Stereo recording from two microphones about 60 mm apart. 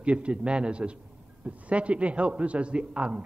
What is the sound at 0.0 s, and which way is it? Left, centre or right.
A man's voice, centre.